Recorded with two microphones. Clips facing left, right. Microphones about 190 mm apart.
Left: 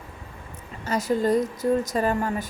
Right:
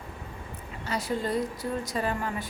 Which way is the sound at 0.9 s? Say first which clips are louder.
Left 7 dB; 45° left (ahead or behind).